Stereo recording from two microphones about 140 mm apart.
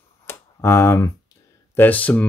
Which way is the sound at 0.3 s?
20° left (ahead or behind).